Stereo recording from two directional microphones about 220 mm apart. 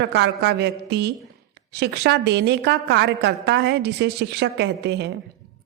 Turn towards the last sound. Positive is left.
turn(degrees=-50)  # may be behind; listen again after turning